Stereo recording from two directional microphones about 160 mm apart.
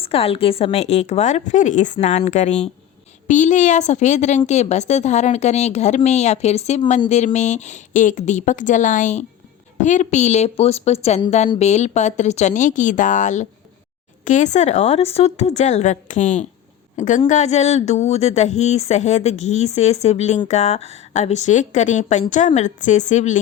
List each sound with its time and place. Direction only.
0.0 s speech: 35° left (ahead or behind)